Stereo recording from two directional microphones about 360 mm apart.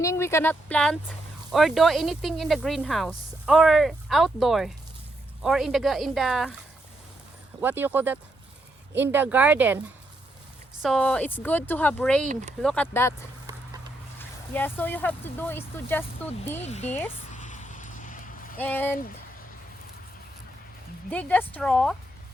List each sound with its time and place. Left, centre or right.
0.0 s speech: centre
7.6 s speech: centre
10.8 s speech: centre
12.3 s speech: centre
12.6 s speech: centre
14.2 s speech: centre
16.6 s speech: centre
17.3 s vehicle: centre
18.5 s speech: centre
21.1 s speech: centre